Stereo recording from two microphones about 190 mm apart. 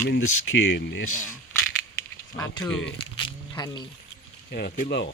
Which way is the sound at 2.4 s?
15° left (ahead or behind).